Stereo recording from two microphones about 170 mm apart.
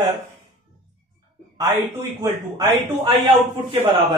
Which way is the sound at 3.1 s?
30° right (ahead or behind).